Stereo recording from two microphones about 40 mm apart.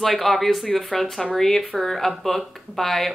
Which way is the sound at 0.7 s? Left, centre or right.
Centre.